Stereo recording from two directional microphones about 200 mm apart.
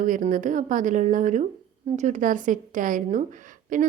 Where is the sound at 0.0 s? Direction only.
40° right (ahead or behind).